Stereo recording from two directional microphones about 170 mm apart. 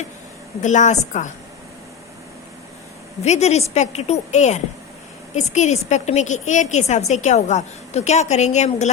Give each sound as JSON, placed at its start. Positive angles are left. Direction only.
{"t": 0.6, "sound": "a woman's voice", "side_deg": 45}
{"t": 3.2, "sound": "a woman's voice", "side_deg": 40}